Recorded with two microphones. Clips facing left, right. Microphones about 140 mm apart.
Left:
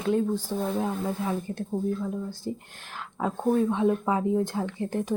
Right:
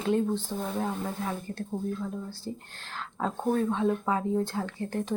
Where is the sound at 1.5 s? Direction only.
15° left (ahead or behind).